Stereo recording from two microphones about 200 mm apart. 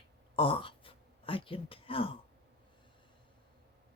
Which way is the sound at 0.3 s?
25° left (ahead or behind).